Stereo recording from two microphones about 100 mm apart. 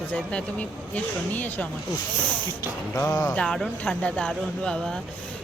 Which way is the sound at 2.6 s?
35° left (ahead or behind).